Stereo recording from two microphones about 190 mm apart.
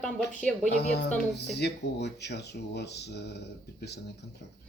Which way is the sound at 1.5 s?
60° left (ahead or behind).